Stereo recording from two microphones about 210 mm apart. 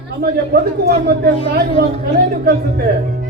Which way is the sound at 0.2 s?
45° right (ahead or behind).